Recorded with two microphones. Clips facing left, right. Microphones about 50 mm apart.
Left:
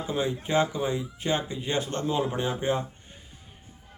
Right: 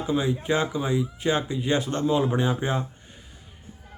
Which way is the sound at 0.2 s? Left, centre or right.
Centre.